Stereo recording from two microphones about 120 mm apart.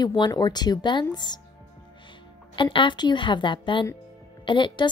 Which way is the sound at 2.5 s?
40° left (ahead or behind).